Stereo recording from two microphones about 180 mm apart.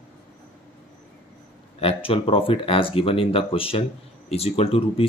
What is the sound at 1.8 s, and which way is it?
Speech, 30° left (ahead or behind).